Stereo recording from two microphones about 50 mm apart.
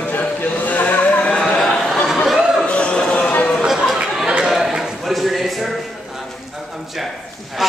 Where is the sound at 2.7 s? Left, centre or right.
Left.